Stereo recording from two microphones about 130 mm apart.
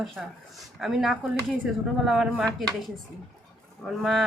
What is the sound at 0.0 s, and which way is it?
Speech, centre (ahead or behind).